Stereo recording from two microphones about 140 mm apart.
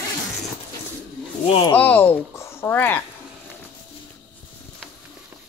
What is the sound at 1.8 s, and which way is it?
Speech, 15° left (ahead or behind).